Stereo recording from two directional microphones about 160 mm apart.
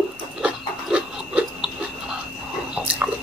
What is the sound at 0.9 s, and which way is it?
Pig, 5° right (ahead or behind).